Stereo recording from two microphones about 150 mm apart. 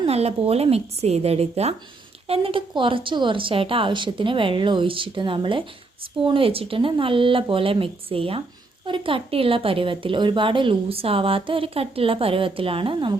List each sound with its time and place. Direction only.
0.0 s a woman's voice: 45° right (ahead or behind)